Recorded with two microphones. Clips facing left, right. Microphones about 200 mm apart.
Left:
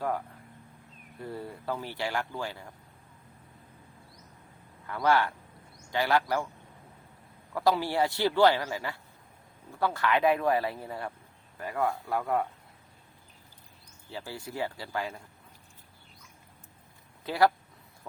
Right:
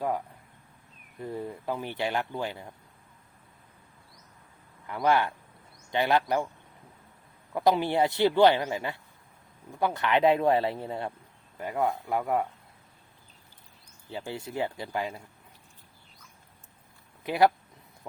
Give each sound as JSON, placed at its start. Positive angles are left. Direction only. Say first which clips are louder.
{"t": 1.2, "sound": "speech", "louder": "right 3 dB", "side_deg": -15}
{"t": 4.9, "sound": "speech", "louder": "right 1 dB", "side_deg": -20}
{"t": 7.5, "sound": "speech", "louder": "right 2 dB", "side_deg": -20}
{"t": 14.1, "sound": "speech", "louder": "right 3 dB", "side_deg": -20}
{"t": 17.2, "sound": "speech", "louder": "right 2 dB", "side_deg": -20}